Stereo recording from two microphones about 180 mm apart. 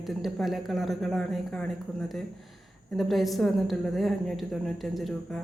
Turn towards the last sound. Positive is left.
turn(degrees=0)  # may be behind; listen again after turning